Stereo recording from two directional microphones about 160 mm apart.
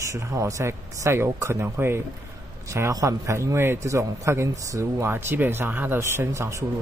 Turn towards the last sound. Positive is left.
turn(degrees=-20)  # may be behind; listen again after turning